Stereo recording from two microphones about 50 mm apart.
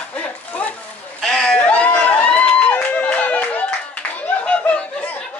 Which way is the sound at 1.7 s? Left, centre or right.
Left.